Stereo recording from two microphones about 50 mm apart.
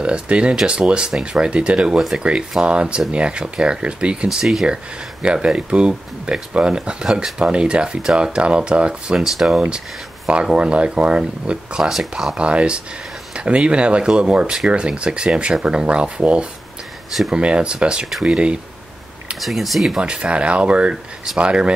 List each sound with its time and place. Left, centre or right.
0.0 s speech: right
4.3 s speech: centre
5.2 s speech: centre
9.2 s speech: centre
10.2 s speech: centre
11.9 s speech: centre
12.4 s speech: right
19.4 s speech: centre
20.0 s speech: right